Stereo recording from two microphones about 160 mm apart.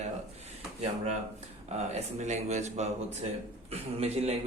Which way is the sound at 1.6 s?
45° right (ahead or behind).